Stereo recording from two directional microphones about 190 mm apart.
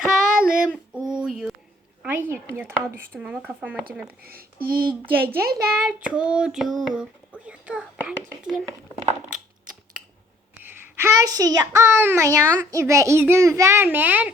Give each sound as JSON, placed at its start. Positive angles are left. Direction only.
{"t": 0.1, "sound": "child singing", "side_deg": -5}
{"t": 0.9, "sound": "a sound", "side_deg": -5}
{"t": 2.0, "sound": "a child's voice", "side_deg": -10}
{"t": 4.2, "sound": "a child's voice", "side_deg": -50}
{"t": 5.8, "sound": "child singing", "side_deg": -5}
{"t": 10.6, "sound": "a child's voice", "side_deg": -10}